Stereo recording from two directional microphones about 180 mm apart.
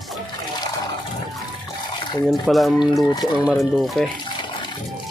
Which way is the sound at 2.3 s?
Centre (ahead or behind).